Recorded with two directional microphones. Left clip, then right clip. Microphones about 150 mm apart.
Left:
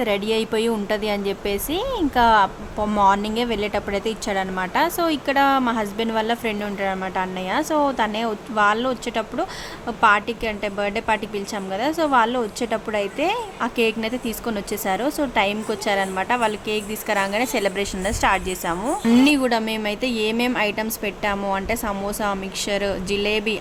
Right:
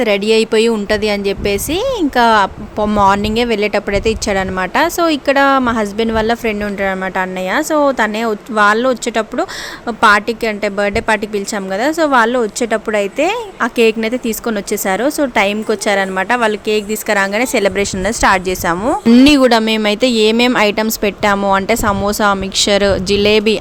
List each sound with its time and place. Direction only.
0.0 s speech: 40° right (ahead or behind)
19.2 s speech: 45° right (ahead or behind)